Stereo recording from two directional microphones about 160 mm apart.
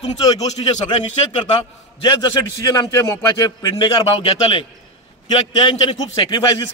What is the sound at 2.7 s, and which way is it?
A man's voice, 20° left (ahead or behind).